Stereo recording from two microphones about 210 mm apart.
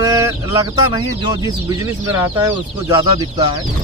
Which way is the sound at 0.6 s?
15° right (ahead or behind).